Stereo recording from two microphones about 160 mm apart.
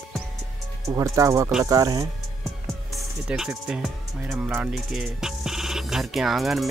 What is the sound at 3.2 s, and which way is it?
Speech, 5° right (ahead or behind).